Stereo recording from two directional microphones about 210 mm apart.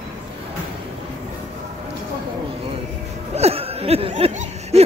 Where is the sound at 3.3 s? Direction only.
30° right (ahead or behind).